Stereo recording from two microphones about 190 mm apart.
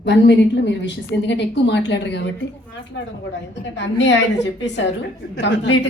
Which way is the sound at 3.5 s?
70° left (ahead or behind).